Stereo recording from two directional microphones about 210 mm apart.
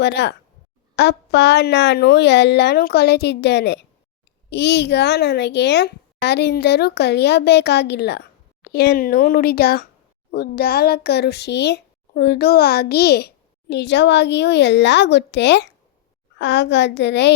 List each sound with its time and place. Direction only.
0.0 s a woman's voice: 55° left (ahead or behind)